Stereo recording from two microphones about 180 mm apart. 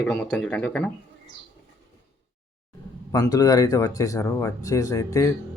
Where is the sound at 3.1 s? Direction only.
20° left (ahead or behind).